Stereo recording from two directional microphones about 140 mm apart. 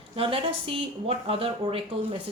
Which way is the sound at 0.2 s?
40° right (ahead or behind).